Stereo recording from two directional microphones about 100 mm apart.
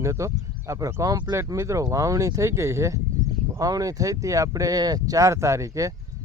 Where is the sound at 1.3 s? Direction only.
30° right (ahead or behind).